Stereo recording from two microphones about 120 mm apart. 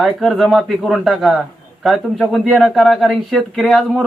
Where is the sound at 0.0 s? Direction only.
Centre (ahead or behind).